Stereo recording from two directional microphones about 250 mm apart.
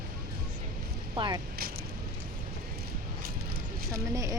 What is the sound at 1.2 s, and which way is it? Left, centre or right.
Speech, centre.